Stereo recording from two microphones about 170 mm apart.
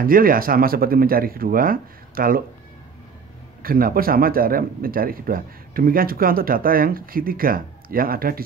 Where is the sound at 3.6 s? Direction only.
60° right (ahead or behind).